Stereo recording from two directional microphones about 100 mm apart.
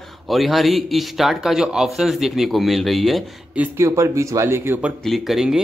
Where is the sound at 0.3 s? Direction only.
Centre (ahead or behind).